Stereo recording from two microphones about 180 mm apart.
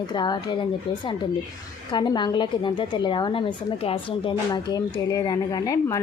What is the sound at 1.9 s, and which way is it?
Speech, 25° left (ahead or behind).